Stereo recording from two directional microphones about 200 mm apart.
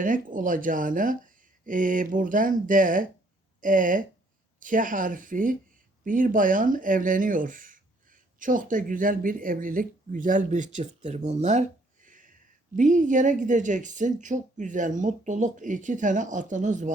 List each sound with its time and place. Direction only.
0.0 s speech: 40° right (ahead or behind)